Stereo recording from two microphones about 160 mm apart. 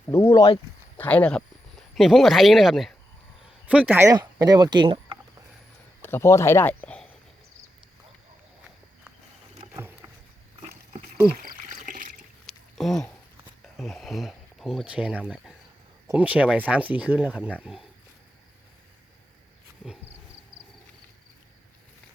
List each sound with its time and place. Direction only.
0.1 s speech: 15° left (ahead or behind)
0.9 s speech: 10° left (ahead or behind); by 5.1 s 30° right (ahead or behind)
6.0 s speech: 15° left (ahead or behind)
11.4 s a sound: 60° right (ahead or behind)
12.5 s a sound: centre (ahead or behind)
13.7 s speech: centre (ahead or behind)